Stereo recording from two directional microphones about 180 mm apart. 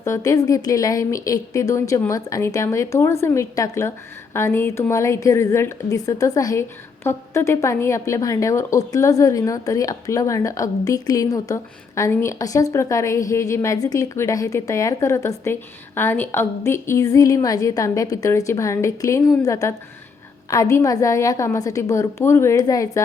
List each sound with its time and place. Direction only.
0.0 s a woman's voice: 15° left (ahead or behind)